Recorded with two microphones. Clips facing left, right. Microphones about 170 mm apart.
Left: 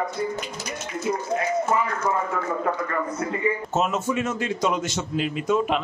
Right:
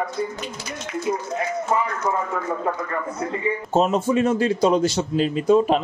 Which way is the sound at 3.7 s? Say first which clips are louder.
Right 10 dB; 30° right (ahead or behind).